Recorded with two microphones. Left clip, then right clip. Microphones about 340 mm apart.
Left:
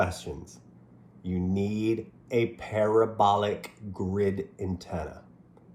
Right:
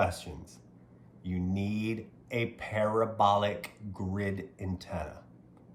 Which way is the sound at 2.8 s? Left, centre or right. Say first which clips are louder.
Left 6 dB; centre.